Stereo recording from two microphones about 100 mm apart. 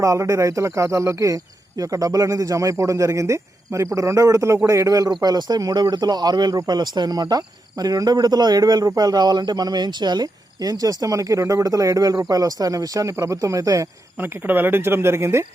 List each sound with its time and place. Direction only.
0.0 s speech: 30° right (ahead or behind)
14.2 s speech: 20° right (ahead or behind)